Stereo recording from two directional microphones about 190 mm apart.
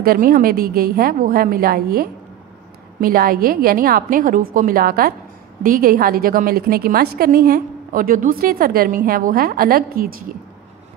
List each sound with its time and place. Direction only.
0.0 s a woman's voice: 50° right (ahead or behind)